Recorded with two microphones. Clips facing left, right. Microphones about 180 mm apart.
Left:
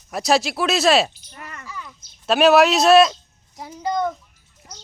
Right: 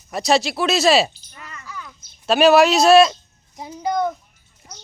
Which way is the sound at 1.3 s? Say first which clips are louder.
Left 2 dB; 60° left (ahead or behind).